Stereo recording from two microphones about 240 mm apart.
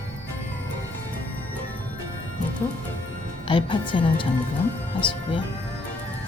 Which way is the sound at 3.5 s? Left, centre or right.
Left.